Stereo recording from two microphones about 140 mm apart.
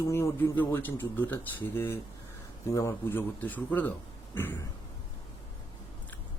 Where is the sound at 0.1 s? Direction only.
20° left (ahead or behind).